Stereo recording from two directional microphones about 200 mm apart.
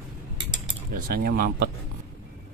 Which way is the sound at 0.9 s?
45° right (ahead or behind).